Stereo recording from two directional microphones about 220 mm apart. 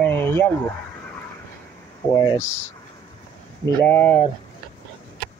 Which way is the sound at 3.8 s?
10° left (ahead or behind).